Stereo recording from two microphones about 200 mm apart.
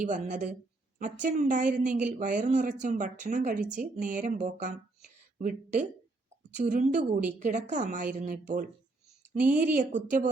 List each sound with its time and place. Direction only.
0.0 s speech: 40° right (ahead or behind)
3.6 s a woman's voice: 5° right (ahead or behind)
3.9 s speech: 40° right (ahead or behind)
9.5 s speech: 5° right (ahead or behind)
9.7 s speech: 40° right (ahead or behind)